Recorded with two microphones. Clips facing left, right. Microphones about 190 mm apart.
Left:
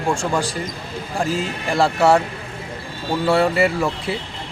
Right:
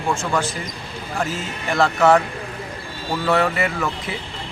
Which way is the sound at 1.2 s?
35° left (ahead or behind).